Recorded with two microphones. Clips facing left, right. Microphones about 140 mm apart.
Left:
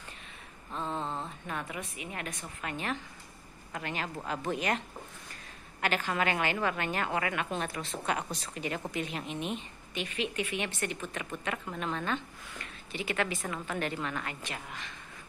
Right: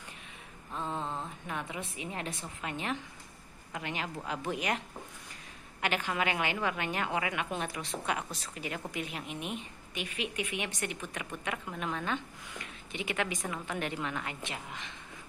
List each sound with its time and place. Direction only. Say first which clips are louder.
0.7 s a sound: left 1 dB; 15° right (ahead or behind)
1.8 s a woman's voice: right 1 dB; 30° right (ahead or behind)
2.6 s a woman's voice: even; 15° right (ahead or behind)